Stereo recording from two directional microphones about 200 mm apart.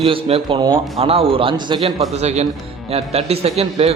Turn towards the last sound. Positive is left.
turn(degrees=-30)  # may be behind; listen again after turning